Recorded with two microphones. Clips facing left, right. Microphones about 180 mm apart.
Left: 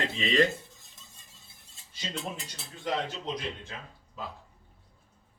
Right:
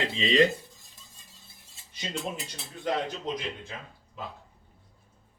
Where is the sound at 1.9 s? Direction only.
20° right (ahead or behind).